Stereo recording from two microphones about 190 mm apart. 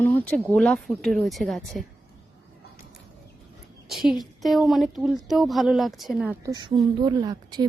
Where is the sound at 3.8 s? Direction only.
Centre (ahead or behind).